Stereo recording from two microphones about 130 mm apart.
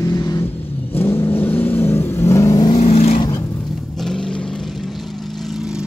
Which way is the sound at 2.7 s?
55° left (ahead or behind).